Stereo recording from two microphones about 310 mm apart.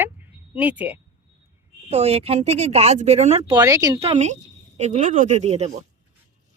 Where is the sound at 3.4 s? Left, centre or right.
Centre.